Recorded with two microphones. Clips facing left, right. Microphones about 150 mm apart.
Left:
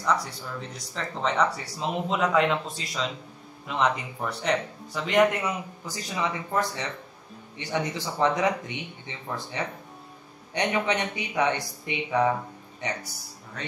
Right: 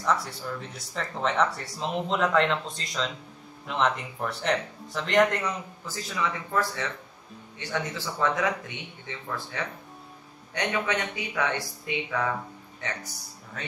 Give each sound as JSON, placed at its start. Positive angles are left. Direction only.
{"t": 0.0, "sound": "speech", "side_deg": 0}
{"t": 5.9, "sound": "speech", "side_deg": 20}
{"t": 13.5, "sound": "speech", "side_deg": 0}